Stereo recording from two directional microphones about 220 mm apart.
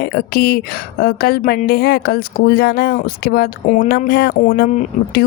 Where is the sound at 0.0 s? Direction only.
45° left (ahead or behind).